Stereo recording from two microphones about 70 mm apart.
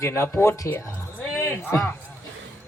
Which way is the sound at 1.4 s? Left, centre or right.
Left.